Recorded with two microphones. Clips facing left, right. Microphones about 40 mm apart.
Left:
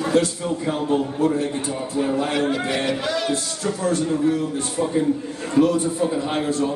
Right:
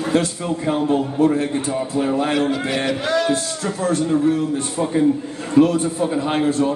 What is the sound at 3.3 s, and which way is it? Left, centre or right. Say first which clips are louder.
Speech: right 2 dB; right.